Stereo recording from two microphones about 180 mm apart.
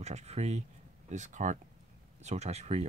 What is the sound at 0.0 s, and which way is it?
Speech, 35° right (ahead or behind).